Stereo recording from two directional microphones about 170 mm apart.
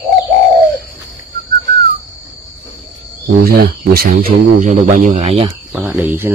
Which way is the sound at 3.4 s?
60° right (ahead or behind).